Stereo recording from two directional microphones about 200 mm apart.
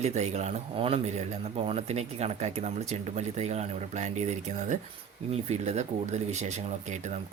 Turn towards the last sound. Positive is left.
turn(degrees=-35)  # may be behind; listen again after turning